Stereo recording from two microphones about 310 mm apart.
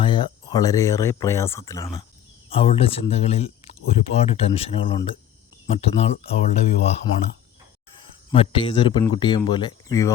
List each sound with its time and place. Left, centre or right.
0.0 s speech: centre
7.9 s speech: centre